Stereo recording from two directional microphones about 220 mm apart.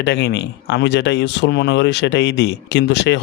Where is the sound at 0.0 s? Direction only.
50° left (ahead or behind).